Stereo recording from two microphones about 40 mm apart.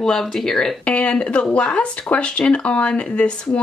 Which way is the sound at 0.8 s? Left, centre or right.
Left.